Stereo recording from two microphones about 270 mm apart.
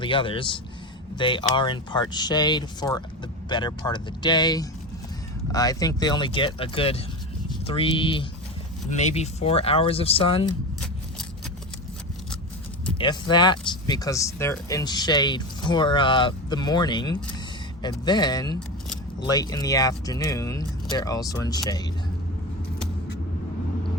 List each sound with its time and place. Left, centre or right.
0.0 s speech: centre
13.0 s speech: centre